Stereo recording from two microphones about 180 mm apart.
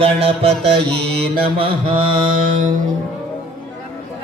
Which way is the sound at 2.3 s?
50° right (ahead or behind).